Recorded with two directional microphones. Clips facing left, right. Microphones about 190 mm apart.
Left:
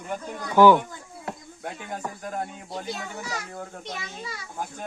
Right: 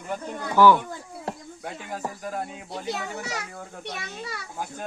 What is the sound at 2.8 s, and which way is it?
A child's voice, 65° right (ahead or behind).